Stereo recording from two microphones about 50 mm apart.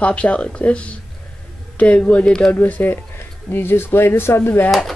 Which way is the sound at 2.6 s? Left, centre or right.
Left.